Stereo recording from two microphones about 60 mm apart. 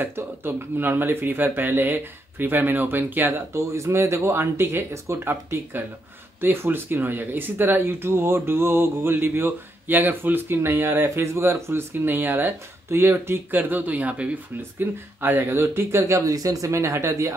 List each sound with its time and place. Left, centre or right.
0.0 s speech: right
3.5 s speech: right
11.1 s speech: right
14.8 s speech: right